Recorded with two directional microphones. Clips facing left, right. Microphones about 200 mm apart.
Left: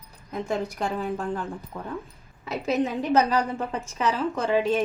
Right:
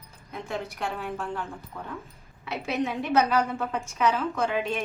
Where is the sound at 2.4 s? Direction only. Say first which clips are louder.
Left 3 dB; 35° left (ahead or behind).